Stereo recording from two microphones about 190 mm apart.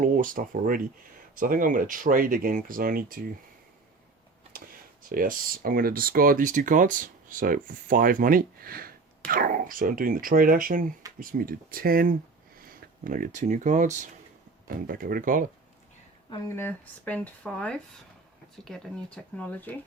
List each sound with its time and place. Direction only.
0.0 s speech: 45° right (ahead or behind)
4.5 s a sound: 50° right (ahead or behind)
5.0 s speech: 50° right (ahead or behind)
16.6 s speech: 10° left (ahead or behind)